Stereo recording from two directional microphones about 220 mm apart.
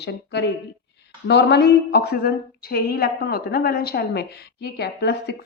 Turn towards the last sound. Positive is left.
turn(degrees=50)  # may be behind; listen again after turning